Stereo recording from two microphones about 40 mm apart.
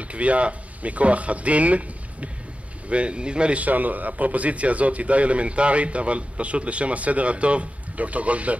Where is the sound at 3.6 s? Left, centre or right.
Right.